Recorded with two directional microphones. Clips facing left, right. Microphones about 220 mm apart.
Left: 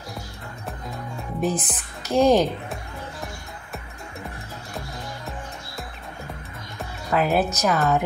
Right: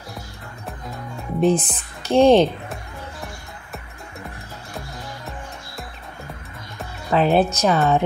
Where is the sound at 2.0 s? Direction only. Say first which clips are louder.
Right 4 dB; 30° right (ahead or behind).